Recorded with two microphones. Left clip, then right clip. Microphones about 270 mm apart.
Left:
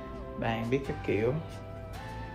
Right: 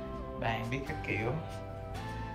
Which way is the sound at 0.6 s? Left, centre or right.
Left.